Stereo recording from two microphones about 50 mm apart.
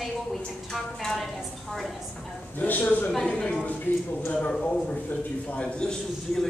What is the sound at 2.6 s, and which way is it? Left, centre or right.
Speech, left.